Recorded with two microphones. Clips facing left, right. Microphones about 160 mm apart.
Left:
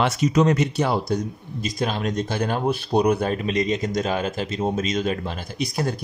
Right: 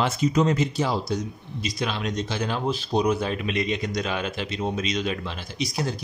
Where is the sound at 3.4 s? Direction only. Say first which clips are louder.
Left 4 dB; 40° left (ahead or behind).